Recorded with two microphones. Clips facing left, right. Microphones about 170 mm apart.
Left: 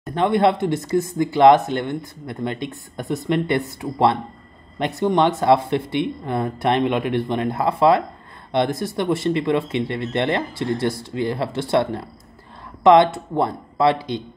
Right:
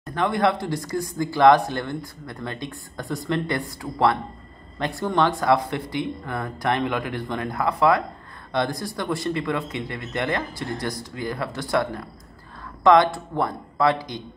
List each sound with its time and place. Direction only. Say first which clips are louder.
0.0 s speech: left 4 dB; 25° left (ahead or behind)